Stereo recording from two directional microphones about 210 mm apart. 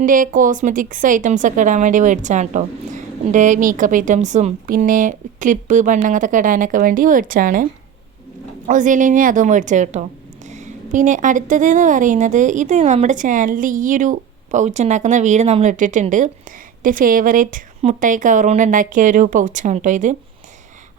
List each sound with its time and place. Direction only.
0.0 s a woman's voice: 40° right (ahead or behind)